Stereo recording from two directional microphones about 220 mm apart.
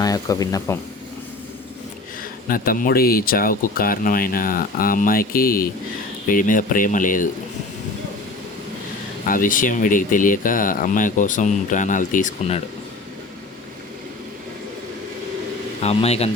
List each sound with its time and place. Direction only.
0.0 s speech: 15° left (ahead or behind)
2.5 s speech: 40° left (ahead or behind)
9.2 s speech: 40° left (ahead or behind)
15.8 s speech: 30° left (ahead or behind)